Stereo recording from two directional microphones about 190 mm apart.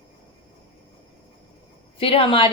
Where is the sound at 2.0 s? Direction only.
30° left (ahead or behind).